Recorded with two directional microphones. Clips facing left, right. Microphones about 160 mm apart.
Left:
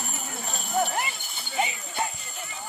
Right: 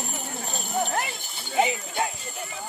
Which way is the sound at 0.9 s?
90° right.